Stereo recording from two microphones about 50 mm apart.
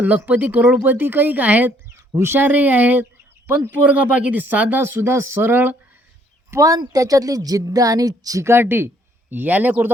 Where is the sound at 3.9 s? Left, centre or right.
Right.